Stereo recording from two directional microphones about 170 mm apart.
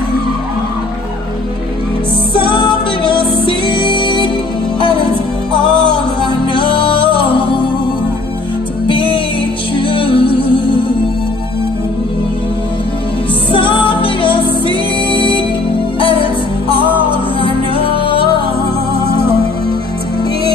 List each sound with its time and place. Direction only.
2.3 s music: 30° left (ahead or behind)
6.5 s music: 30° left (ahead or behind)
8.8 s music: 30° left (ahead or behind)
13.5 s music: 30° left (ahead or behind)